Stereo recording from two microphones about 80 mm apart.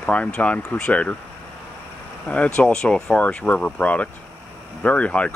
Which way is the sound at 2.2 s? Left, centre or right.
Centre.